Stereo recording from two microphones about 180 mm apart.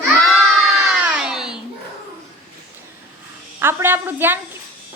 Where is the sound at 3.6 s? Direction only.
15° right (ahead or behind).